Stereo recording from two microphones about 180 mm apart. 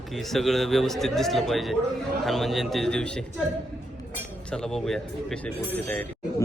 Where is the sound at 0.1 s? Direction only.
Centre (ahead or behind).